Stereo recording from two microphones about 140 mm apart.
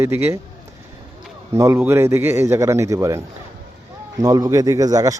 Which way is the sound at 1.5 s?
20° right (ahead or behind).